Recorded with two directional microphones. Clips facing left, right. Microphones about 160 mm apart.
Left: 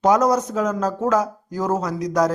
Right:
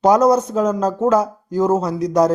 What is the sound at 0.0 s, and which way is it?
Speech, 30° right (ahead or behind).